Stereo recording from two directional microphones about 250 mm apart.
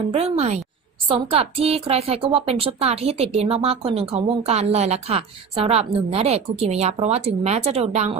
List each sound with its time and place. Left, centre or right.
0.1 s a woman's voice: right